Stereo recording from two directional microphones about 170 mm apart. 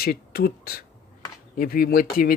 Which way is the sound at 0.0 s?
65° left (ahead or behind).